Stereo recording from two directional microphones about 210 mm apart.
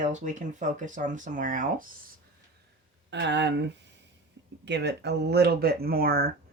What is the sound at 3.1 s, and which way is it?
Speech, 55° right (ahead or behind).